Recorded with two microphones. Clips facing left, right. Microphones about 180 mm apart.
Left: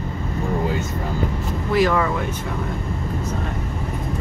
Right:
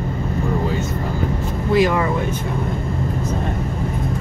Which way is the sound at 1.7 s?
20° right (ahead or behind).